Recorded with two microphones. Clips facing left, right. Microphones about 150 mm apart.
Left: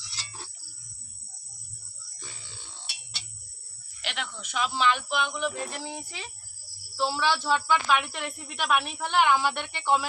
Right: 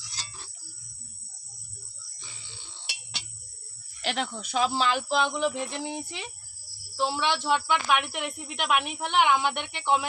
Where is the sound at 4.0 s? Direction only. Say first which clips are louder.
Right 6 dB; 40° right (ahead or behind).